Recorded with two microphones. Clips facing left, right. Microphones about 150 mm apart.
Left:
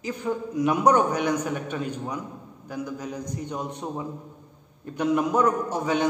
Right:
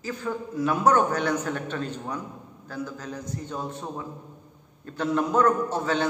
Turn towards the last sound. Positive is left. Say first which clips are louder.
# left 1 dB
turn(degrees=15)  # may be behind; listen again after turning